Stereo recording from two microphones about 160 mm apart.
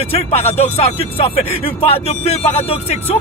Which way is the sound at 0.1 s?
40° left (ahead or behind).